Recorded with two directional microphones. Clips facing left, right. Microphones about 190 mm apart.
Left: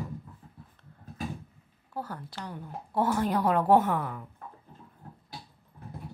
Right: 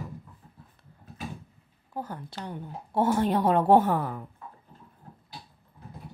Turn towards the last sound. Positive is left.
turn(degrees=-35)  # may be behind; listen again after turning